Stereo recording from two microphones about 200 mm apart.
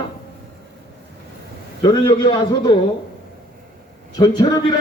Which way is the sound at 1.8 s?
20° left (ahead or behind).